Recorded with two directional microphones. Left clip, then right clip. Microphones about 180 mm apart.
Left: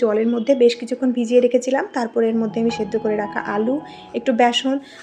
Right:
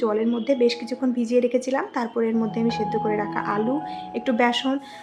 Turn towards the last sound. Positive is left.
turn(degrees=10)  # may be behind; listen again after turning